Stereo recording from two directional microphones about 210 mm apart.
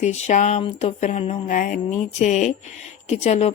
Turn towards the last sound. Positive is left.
turn(degrees=30)  # may be behind; listen again after turning